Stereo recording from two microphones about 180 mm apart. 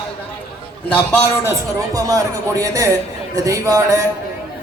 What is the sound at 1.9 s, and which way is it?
A man's voice, 20° right (ahead or behind).